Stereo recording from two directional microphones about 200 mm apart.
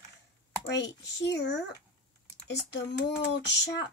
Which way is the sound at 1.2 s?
60° left (ahead or behind).